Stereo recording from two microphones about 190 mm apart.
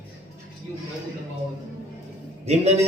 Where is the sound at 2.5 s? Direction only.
35° right (ahead or behind).